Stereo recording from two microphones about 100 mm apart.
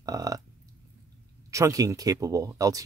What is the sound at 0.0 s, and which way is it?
Burping, 35° right (ahead or behind).